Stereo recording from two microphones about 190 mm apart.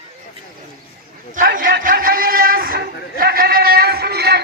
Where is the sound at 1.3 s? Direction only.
45° right (ahead or behind).